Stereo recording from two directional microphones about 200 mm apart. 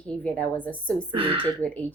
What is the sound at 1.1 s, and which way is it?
Speech, 25° right (ahead or behind).